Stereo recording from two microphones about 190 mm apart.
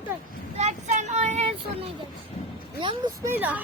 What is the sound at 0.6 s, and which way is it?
Child singing, 35° right (ahead or behind).